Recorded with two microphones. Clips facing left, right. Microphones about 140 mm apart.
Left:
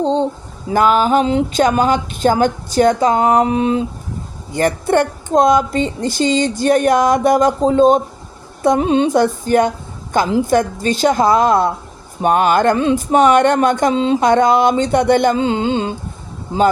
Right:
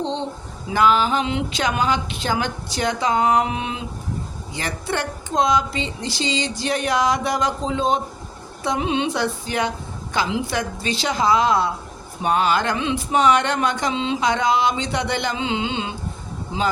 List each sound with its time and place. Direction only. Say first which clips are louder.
0.0 s speech: left 9 dB; 45° left (ahead or behind)
4.5 s speech: left 12 dB; 50° left (ahead or behind)